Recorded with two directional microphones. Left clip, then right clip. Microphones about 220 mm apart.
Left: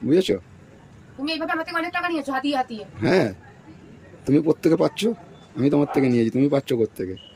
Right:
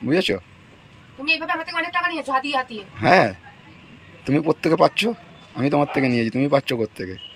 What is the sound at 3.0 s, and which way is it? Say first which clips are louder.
Speech: right 5 dB; 5° left (ahead or behind).